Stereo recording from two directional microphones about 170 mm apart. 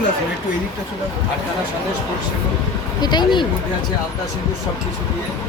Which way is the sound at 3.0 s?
25° left (ahead or behind).